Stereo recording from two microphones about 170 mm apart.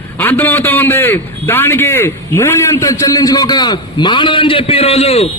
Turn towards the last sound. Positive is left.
turn(degrees=35)  # may be behind; listen again after turning